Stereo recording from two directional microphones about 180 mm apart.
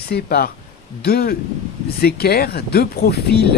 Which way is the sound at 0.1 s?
60° left (ahead or behind).